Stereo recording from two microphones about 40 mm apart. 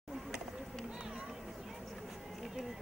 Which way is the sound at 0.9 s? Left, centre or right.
Centre.